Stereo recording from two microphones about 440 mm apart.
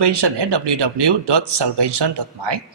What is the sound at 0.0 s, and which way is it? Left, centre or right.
Speech, right.